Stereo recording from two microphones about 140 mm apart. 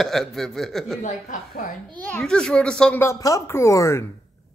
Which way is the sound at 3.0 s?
20° left (ahead or behind).